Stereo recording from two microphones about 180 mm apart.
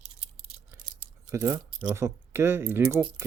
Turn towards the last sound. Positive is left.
turn(degrees=-15)  # may be behind; listen again after turning